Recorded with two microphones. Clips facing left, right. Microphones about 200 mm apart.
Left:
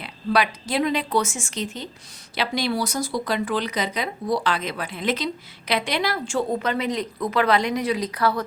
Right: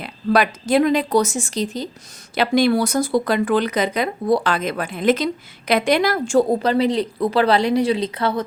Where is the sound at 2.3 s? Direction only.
50° right (ahead or behind).